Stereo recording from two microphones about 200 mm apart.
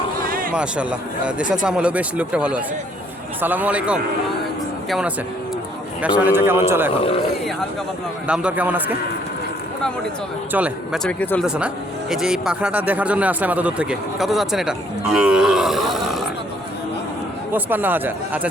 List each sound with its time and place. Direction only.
0.5 s speech: 5° right (ahead or behind)
7.0 s speech: 30° left (ahead or behind)
8.3 s speech: 5° right (ahead or behind)
10.5 s speech: 5° right (ahead or behind)
11.4 s speech: 5° right (ahead or behind)
17.5 s speech: 10° right (ahead or behind)